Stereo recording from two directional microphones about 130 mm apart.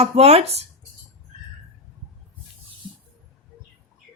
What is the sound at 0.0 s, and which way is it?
Speech, 50° right (ahead or behind).